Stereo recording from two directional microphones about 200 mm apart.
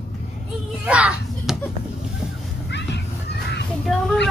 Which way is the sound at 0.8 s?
5° right (ahead or behind).